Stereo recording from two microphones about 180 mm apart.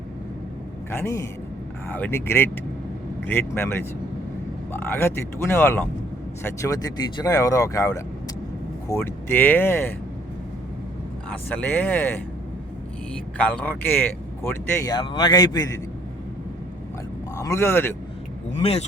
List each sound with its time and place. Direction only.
0.9 s speech: 15° left (ahead or behind)
11.3 s speech: 10° left (ahead or behind)
13.3 s speech: 5° left (ahead or behind)
14.9 s speech: 25° left (ahead or behind)
17.3 s speech: 15° left (ahead or behind)
18.6 s speech: 35° left (ahead or behind)